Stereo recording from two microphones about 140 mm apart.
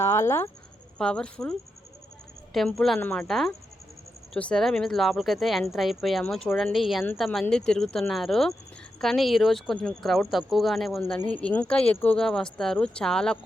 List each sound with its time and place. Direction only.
0.0 s speech: 20° left (ahead or behind)
0.9 s a woman's voice: 5° left (ahead or behind)
3.2 s a woman's voice: centre (ahead or behind)
11.2 s speech: 10° left (ahead or behind)